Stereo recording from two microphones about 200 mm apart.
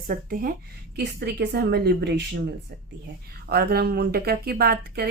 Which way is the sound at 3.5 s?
50° right (ahead or behind).